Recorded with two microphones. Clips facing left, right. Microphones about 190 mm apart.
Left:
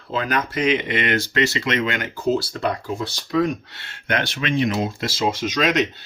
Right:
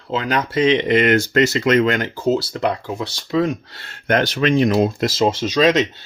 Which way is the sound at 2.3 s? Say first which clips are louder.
Right 2 dB; 25° right (ahead or behind).